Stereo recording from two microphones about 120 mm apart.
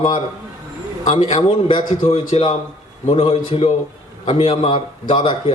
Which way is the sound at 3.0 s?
55° left (ahead or behind).